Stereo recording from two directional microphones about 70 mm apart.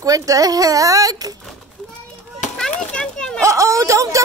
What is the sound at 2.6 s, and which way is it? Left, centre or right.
Children playing, centre.